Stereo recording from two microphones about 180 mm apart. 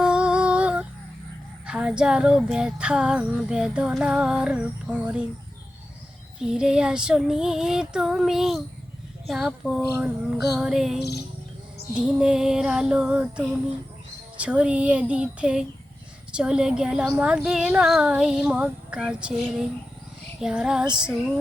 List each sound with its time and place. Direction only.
0.0 s music: 5° right (ahead or behind)
1.6 s female singing: 5° right (ahead or behind)
6.4 s female singing: 5° right (ahead or behind)
14.3 s speech: 5° right (ahead or behind)
16.3 s female singing: 5° right (ahead or behind)